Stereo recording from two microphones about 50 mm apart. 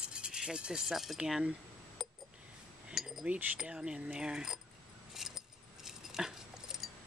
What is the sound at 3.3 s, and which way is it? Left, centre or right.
Wind chime, right.